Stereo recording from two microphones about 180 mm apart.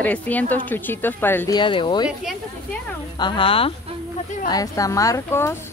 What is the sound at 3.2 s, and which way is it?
A woman's voice, 30° left (ahead or behind).